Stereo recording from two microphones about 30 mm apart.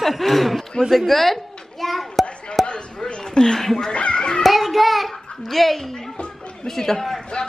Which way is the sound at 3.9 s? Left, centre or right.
Left.